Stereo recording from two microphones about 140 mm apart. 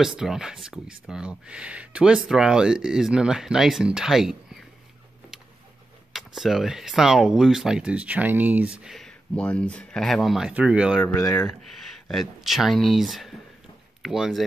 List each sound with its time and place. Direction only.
0.0 s speech: 5° right (ahead or behind)
6.1 s speech: centre (ahead or behind)
11.1 s speech: 20° left (ahead or behind)
12.1 s speech: centre (ahead or behind)